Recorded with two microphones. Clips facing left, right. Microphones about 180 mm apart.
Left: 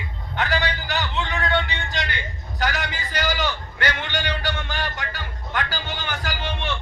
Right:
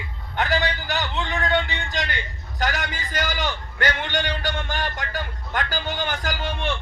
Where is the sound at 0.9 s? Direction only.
45° right (ahead or behind).